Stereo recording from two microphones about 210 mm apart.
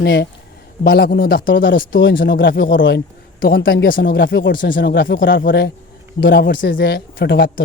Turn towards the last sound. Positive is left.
turn(degrees=50)  # may be behind; listen again after turning